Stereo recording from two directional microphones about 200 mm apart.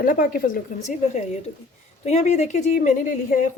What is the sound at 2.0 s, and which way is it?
A woman's voice, 35° left (ahead or behind).